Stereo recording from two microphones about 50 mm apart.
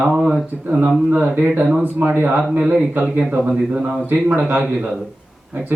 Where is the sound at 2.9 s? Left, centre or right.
Right.